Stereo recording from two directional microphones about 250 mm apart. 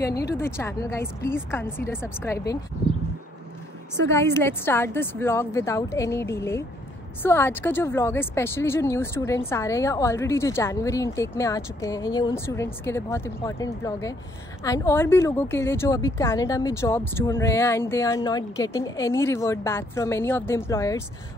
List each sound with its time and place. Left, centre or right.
0.0 s a woman's voice: left
0.4 s a woman's voice: centre
4.1 s a woman's voice: centre